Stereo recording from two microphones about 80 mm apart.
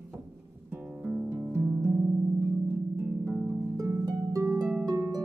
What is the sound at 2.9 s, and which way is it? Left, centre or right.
Harp, right.